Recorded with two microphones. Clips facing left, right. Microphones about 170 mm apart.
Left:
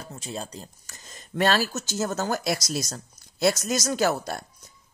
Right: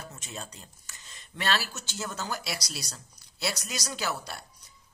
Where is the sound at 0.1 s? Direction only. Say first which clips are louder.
Left 7 dB; 35° left (ahead or behind).